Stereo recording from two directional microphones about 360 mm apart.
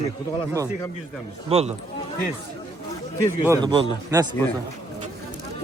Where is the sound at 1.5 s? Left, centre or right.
Centre.